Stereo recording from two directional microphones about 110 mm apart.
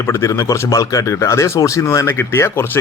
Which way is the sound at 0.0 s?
25° left (ahead or behind).